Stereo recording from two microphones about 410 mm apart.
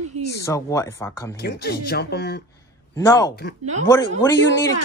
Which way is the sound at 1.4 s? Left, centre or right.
Left.